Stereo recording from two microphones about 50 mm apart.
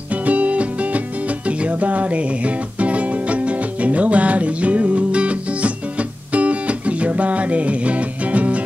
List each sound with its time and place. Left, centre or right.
0.1 s music: right